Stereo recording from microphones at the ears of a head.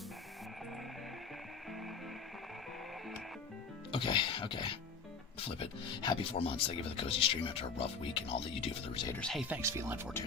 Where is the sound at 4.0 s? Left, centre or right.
Left.